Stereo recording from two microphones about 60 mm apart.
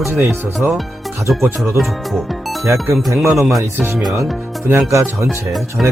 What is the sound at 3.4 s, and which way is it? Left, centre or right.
Speech, centre.